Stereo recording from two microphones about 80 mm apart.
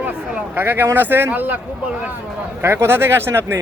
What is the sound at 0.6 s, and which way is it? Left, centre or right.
Speech, right.